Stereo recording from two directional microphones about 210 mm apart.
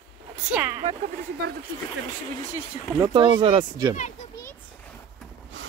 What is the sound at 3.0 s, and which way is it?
Speech, 20° right (ahead or behind).